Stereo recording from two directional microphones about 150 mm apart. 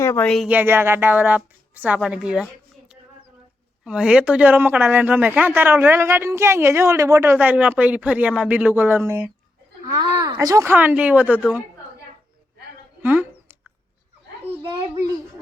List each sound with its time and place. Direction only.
0.0 s speech: 20° left (ahead or behind)
0.4 s speech: 10° right (ahead or behind)
3.8 s speech: 5° right (ahead or behind)
9.8 s speech: 25° right (ahead or behind); by 11.3 s 10° right (ahead or behind)
13.0 s a sound: 10° right (ahead or behind)